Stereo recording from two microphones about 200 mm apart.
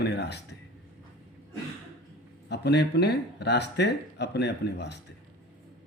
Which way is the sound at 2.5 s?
60° left (ahead or behind).